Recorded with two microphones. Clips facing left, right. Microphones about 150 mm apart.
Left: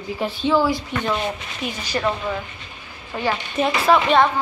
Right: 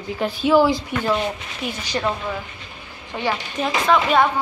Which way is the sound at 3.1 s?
10° right (ahead or behind).